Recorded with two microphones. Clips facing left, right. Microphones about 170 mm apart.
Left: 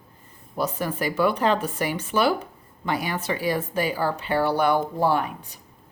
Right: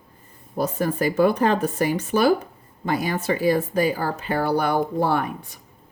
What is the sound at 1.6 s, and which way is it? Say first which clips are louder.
Speech: right 5 dB; 40° right (ahead or behind).